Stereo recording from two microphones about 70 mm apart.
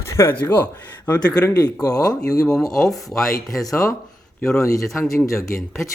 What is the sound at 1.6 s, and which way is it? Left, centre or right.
Speech, left.